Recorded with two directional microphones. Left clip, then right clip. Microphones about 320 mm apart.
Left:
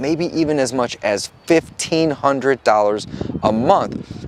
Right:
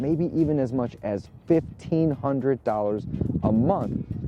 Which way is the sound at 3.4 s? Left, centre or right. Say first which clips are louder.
Left 10 dB; centre.